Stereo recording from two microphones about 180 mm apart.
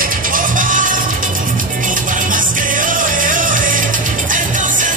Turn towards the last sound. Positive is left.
turn(degrees=-45)  # may be behind; listen again after turning